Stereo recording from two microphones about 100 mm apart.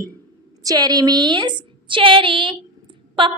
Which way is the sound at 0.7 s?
40° right (ahead or behind).